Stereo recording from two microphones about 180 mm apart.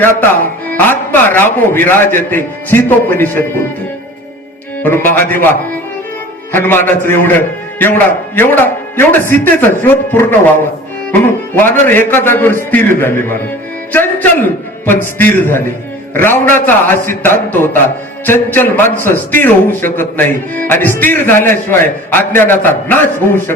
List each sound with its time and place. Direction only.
0.7 s speech: 10° left (ahead or behind)
4.8 s speech: 10° left (ahead or behind)
6.5 s a man's voice: 10° left (ahead or behind)